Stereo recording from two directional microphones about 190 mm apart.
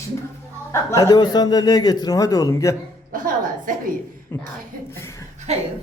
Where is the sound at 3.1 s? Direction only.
45° right (ahead or behind).